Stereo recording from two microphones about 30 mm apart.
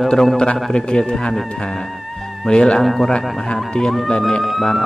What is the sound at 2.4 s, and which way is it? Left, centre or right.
Speech, left.